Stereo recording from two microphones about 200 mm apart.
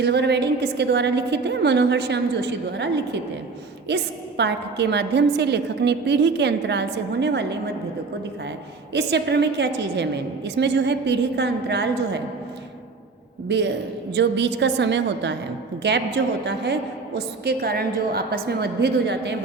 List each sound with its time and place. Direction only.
0.0 s a woman's voice: 55° right (ahead or behind)
8.9 s a woman's voice: 60° right (ahead or behind)
13.5 s a woman's voice: 60° right (ahead or behind)